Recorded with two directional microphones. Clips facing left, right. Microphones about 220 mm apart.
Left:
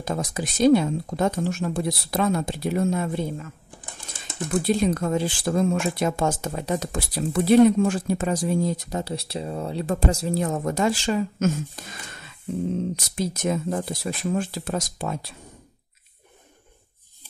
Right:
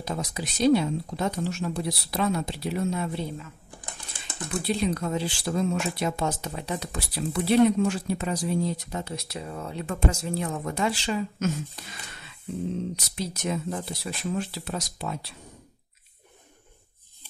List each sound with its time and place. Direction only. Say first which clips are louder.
0.0 s speech: left 4 dB; 50° left (ahead or behind)
4.5 s speech: left 5 dB; 45° left (ahead or behind)